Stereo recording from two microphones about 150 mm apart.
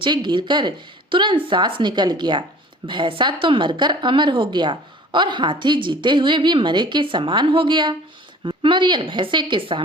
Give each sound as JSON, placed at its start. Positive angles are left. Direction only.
{"t": 0.0, "sound": "a woman's voice", "side_deg": -30}